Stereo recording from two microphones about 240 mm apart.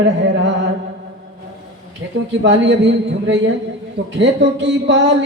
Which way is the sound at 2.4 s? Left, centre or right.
Right.